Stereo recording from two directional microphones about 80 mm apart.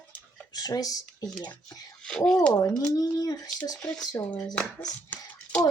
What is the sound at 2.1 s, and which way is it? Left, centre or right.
Speech, centre.